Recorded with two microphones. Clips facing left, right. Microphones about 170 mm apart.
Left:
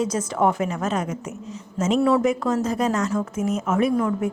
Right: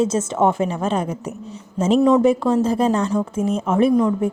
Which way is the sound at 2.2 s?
30° right (ahead or behind).